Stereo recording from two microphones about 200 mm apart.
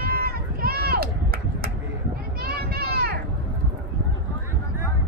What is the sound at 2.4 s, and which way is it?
Children playing, 50° right (ahead or behind).